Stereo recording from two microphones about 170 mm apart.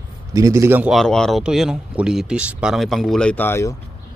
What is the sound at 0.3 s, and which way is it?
Speech, 20° right (ahead or behind).